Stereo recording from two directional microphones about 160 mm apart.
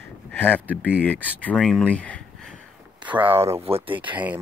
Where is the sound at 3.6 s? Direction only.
40° right (ahead or behind).